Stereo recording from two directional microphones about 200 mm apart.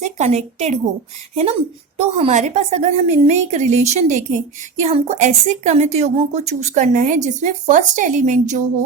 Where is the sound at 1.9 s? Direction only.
30° right (ahead or behind).